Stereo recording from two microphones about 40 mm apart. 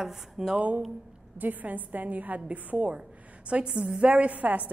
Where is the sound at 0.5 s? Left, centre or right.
Right.